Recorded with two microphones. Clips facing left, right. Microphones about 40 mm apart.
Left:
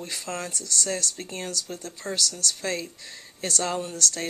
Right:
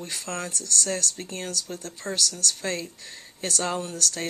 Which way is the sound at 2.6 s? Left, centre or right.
Right.